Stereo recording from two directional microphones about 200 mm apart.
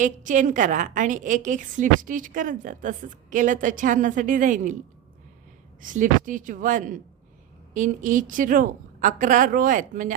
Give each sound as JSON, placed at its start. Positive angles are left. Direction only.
{"t": 0.0, "sound": "a woman's voice", "side_deg": -40}
{"t": 5.8, "sound": "a woman's voice", "side_deg": -40}